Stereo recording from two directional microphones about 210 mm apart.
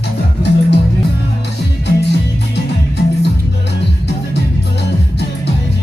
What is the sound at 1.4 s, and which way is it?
Music, 55° left (ahead or behind).